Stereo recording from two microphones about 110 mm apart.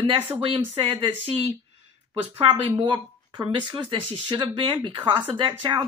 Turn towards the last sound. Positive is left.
turn(degrees=-50)  # may be behind; listen again after turning